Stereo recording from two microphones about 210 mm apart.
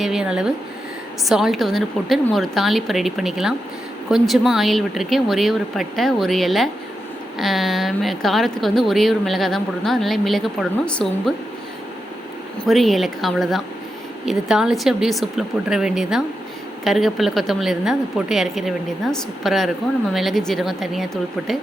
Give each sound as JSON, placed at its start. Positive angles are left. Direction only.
{"t": 0.0, "sound": "a woman's voice", "side_deg": -5}
{"t": 12.6, "sound": "a woman's voice", "side_deg": 0}